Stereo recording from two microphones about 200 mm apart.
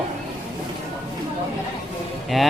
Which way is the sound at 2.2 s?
Centre (ahead or behind).